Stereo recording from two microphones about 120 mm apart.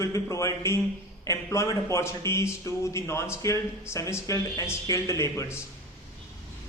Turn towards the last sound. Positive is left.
turn(degrees=25)  # may be behind; listen again after turning